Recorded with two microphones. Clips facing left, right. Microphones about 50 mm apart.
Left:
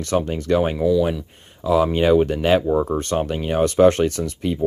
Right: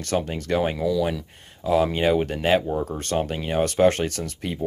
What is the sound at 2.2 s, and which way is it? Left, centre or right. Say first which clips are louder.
Speech: left 4 dB; right.